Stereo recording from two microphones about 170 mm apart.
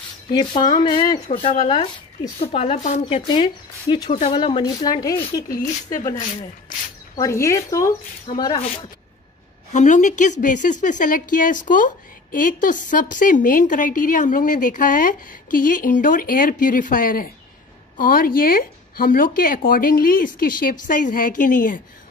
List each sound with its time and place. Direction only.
0.3 s speech: 25° left (ahead or behind); by 4.4 s 40° left (ahead or behind)
4.4 s speech: 30° left (ahead or behind)
7.2 s speech: 15° left (ahead or behind)
8.3 s speech: 30° left (ahead or behind)
9.7 s speech: 45° left (ahead or behind)